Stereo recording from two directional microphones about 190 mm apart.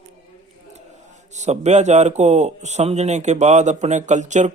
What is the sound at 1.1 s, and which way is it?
A man's voice, 40° right (ahead or behind).